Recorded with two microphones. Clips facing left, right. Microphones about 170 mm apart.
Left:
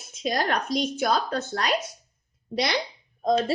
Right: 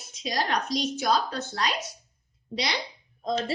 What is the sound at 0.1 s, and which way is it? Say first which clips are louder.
Speech: left 3 dB; 50° left (ahead or behind).